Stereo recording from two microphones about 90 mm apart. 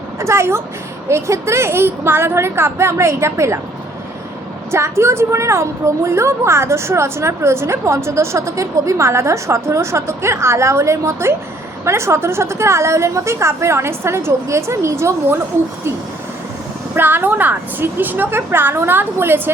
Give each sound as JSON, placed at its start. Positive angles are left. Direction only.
{"t": 0.2, "sound": "a woman's voice", "side_deg": -30}
{"t": 4.7, "sound": "a woman's voice", "side_deg": -30}
{"t": 16.9, "sound": "a woman's voice", "side_deg": -25}